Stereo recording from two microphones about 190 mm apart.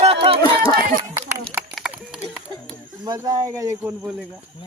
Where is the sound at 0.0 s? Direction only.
30° right (ahead or behind).